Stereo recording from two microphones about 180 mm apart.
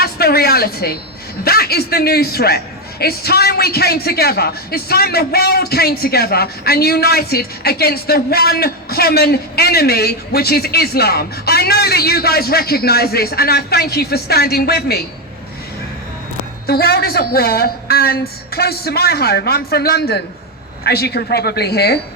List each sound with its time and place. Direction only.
0.0 s a woman's voice: 60° left (ahead or behind)
16.6 s a man's voice: 60° left (ahead or behind)